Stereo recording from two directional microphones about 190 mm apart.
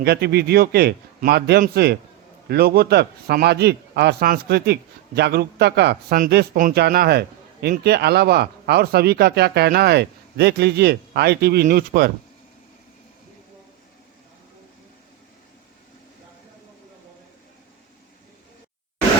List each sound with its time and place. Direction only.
0.0 s a man's voice: 60° right (ahead or behind)